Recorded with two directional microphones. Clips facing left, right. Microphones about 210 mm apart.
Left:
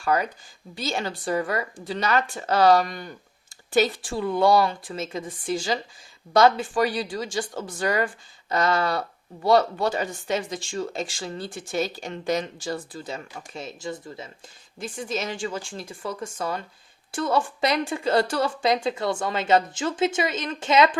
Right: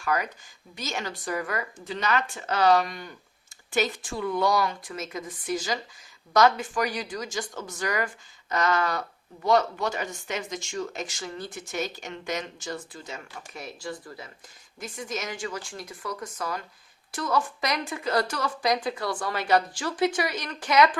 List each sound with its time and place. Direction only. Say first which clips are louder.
0.0 s a woman's voice: left 4 dB; 30° left (ahead or behind)